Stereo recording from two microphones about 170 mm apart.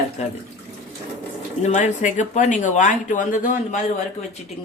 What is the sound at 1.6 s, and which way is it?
Speech, 45° left (ahead or behind).